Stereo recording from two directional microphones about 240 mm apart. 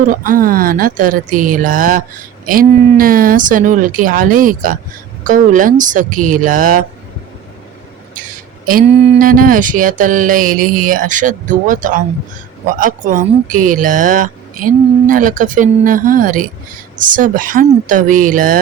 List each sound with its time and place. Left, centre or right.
0.0 s speech: right
8.1 s speech: right